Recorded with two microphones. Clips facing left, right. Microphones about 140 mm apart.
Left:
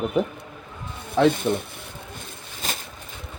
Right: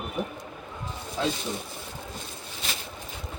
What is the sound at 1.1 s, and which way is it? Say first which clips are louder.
Speech: left 11 dB; 60° left (ahead or behind).